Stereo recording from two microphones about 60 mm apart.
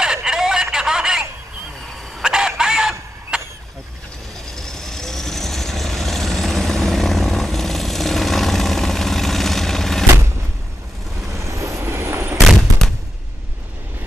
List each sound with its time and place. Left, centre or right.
0.0 s telephone: centre
2.2 s chicken: centre
4.6 s vehicle: centre
11.3 s vehicle: right
12.4 s artillery fire: centre